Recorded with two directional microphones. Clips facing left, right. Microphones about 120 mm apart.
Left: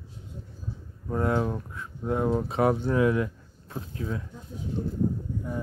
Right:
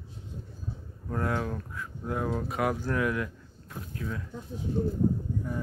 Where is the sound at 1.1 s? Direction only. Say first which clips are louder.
Left 4 dB; 20° left (ahead or behind).